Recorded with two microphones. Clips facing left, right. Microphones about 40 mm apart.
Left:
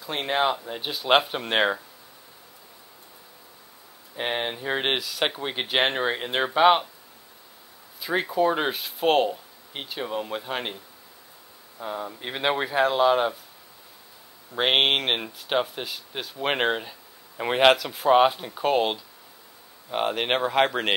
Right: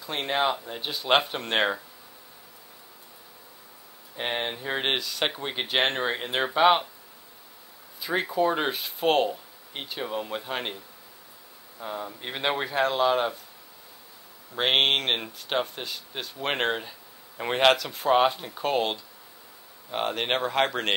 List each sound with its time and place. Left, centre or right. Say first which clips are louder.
0.0 s speech: left 2 dB; centre
4.2 s speech: left 2 dB; centre
8.0 s speech: left 2 dB; centre
11.8 s speech: left 2 dB; centre
14.5 s speech: left 1 dB; centre